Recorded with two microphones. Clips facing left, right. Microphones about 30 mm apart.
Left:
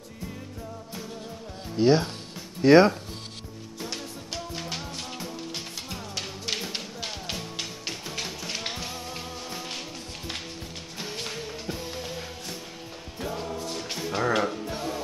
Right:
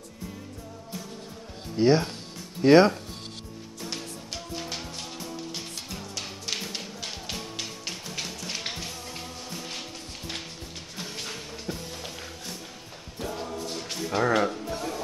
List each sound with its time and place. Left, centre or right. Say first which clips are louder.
1.8 s speech: even; centre
3.8 s music: left 1 dB; centre
11.0 s music: left 2 dB; centre
13.7 s music: right 3 dB; centre
14.2 s music: right 1 dB; centre
14.5 s music: even; centre